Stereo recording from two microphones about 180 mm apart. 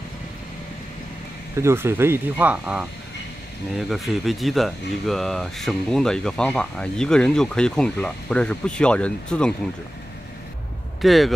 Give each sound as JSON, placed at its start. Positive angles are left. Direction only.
{"t": 1.6, "sound": "speech", "side_deg": -15}
{"t": 11.0, "sound": "speech", "side_deg": 0}